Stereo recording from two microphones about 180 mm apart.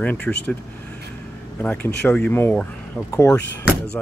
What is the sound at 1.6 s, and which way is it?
Speech, 10° left (ahead or behind).